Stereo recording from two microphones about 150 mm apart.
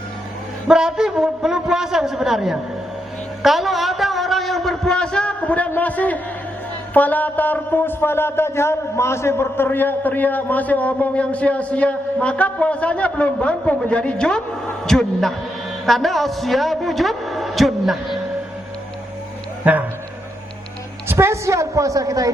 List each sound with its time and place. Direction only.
0.7 s a sound: 5° right (ahead or behind)
3.4 s a man's voice: centre (ahead or behind)
19.6 s speech: 10° right (ahead or behind)
21.1 s a woman's voice: 15° right (ahead or behind)